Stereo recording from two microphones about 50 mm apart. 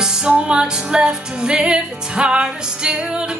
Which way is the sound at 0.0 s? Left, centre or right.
Centre.